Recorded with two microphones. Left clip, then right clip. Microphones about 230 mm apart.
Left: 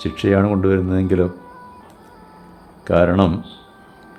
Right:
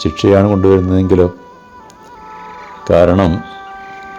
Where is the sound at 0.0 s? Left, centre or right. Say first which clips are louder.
Right 7 dB; centre.